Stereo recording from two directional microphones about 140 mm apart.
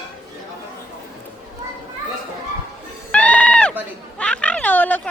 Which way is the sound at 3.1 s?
10° left (ahead or behind).